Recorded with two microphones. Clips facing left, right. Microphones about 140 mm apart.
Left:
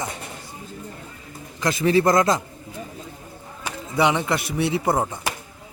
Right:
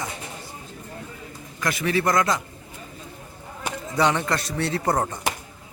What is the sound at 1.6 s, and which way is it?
Speech, 30° left (ahead or behind).